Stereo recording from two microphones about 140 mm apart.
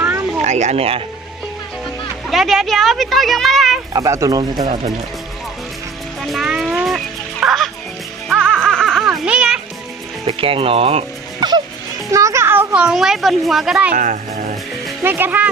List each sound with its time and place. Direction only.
0.0 s a sound: 15° right (ahead or behind)
0.4 s speech: 55° right (ahead or behind)
2.2 s speech: centre (ahead or behind)
3.9 s speech: 25° right (ahead or behind)
4.6 s speech: 45° right (ahead or behind)
6.2 s music: centre (ahead or behind)
10.2 s speech: 40° right (ahead or behind)
11.3 s music: 30° right (ahead or behind)
12.1 s a woman's voice: 20° right (ahead or behind); by 13.9 s 5° right (ahead or behind)
13.9 s speech: 65° right (ahead or behind)
15.0 s speech: 15° right (ahead or behind)